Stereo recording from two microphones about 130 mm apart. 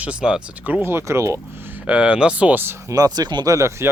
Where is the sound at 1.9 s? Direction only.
10° right (ahead or behind).